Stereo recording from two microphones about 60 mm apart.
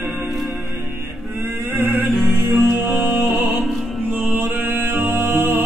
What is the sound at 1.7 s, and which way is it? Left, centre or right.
Music, right.